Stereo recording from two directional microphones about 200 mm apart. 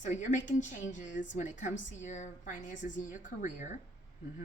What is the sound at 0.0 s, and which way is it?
A woman's voice, 35° left (ahead or behind).